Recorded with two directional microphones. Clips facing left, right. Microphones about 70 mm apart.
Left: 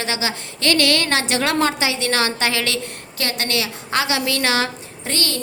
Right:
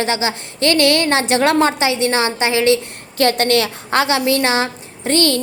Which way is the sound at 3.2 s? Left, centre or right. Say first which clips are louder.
Right 9 dB; right.